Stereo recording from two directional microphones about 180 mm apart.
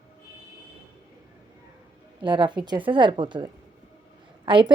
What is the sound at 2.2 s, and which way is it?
A woman's voice, 25° right (ahead or behind).